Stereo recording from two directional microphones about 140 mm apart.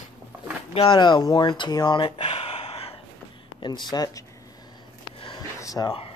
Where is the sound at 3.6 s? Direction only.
30° left (ahead or behind).